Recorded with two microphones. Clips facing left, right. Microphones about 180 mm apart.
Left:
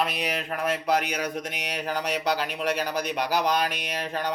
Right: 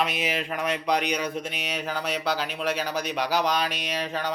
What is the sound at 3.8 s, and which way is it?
Speech, 55° left (ahead or behind).